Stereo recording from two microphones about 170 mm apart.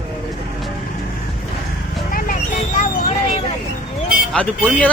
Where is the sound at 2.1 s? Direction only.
55° left (ahead or behind).